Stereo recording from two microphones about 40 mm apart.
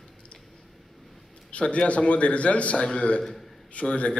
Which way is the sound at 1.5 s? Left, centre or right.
Left.